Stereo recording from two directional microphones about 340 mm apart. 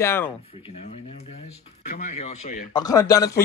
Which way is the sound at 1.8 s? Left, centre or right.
Left.